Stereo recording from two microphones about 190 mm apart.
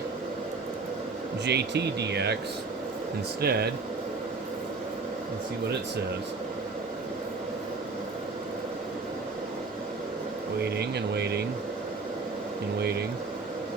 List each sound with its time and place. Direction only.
1.5 s speech: 60° right (ahead or behind)
3.4 s speech: 55° right (ahead or behind)
10.6 s speech: 60° right (ahead or behind)